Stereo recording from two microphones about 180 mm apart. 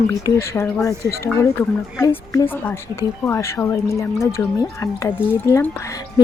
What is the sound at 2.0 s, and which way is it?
Speech, 15° left (ahead or behind).